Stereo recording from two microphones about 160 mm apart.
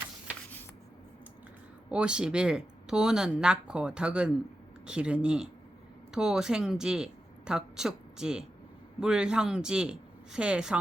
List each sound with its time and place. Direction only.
1.9 s speech: 5° right (ahead or behind)